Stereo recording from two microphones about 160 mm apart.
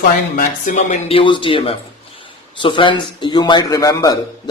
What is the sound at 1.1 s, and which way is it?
A man's voice, 35° left (ahead or behind).